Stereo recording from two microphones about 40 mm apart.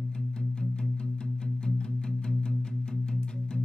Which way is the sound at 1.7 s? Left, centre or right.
Left.